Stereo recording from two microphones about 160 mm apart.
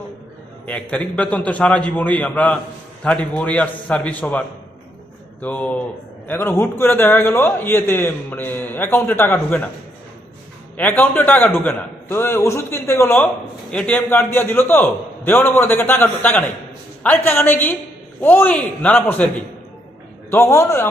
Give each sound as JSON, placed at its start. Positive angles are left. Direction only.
{"t": 0.6, "sound": "a man's voice", "side_deg": 10}
{"t": 10.8, "sound": "a man's voice", "side_deg": 10}
{"t": 20.3, "sound": "a man's voice", "side_deg": 15}